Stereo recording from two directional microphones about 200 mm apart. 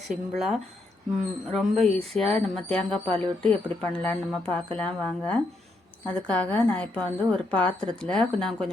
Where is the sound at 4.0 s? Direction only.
5° left (ahead or behind).